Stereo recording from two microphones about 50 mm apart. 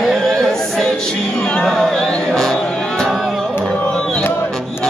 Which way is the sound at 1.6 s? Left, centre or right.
Centre.